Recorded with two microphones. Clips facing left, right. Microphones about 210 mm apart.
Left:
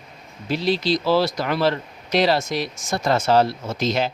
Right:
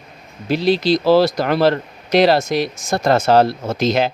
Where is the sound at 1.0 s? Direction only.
40° right (ahead or behind).